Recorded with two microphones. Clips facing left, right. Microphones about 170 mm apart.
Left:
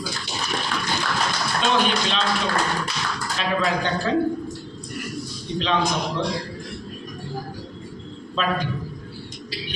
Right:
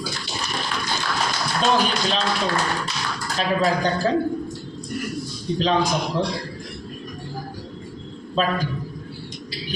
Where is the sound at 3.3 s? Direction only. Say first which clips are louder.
Right 3 dB; 40° right (ahead or behind).